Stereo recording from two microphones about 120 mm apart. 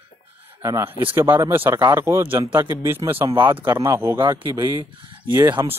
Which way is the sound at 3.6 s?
20° right (ahead or behind).